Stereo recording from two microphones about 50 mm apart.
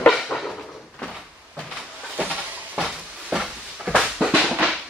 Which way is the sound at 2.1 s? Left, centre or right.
Right.